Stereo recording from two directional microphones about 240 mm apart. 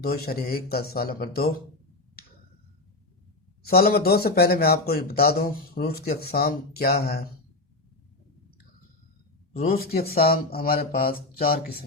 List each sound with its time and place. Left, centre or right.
0.0 s speech: left
3.7 s speech: left
9.6 s speech: left